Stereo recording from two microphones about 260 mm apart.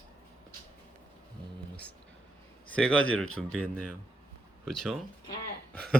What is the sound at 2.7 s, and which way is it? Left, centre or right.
Speech, centre.